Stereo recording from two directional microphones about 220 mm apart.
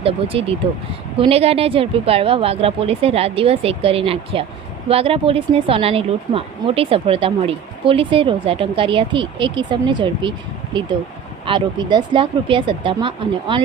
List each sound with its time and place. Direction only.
0.0 s speech: 25° right (ahead or behind)
11.4 s speech: 20° right (ahead or behind)